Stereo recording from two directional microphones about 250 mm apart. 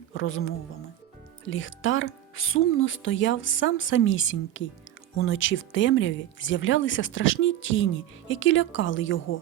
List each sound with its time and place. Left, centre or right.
0.1 s speech: left